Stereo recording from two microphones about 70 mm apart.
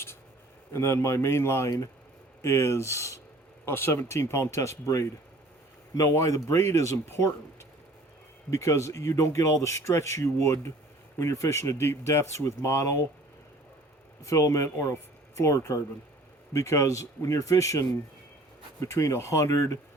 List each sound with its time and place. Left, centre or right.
0.7 s speech: left
8.4 s speech: left
14.3 s speech: left